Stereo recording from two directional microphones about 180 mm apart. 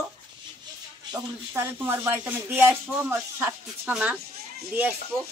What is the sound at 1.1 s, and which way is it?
Speech, 15° right (ahead or behind).